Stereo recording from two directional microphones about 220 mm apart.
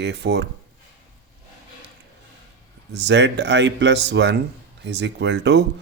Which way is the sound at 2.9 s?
50° right (ahead or behind).